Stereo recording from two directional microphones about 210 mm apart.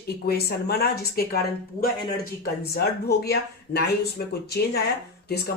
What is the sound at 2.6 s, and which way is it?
Speech, 50° left (ahead or behind).